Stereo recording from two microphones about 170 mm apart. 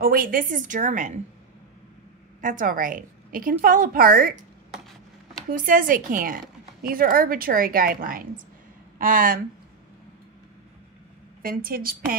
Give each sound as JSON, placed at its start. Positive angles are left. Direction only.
{"t": 0.0, "sound": "a woman's voice", "side_deg": -55}
{"t": 2.4, "sound": "a woman's voice", "side_deg": -50}
{"t": 5.5, "sound": "a woman's voice", "side_deg": -55}
{"t": 11.4, "sound": "a woman's voice", "side_deg": -60}